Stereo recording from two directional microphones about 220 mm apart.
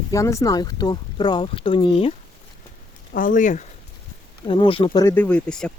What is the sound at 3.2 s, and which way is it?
Speech, 35° left (ahead or behind).